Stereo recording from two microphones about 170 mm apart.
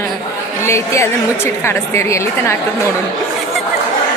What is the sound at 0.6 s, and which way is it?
A woman's voice, 15° left (ahead or behind).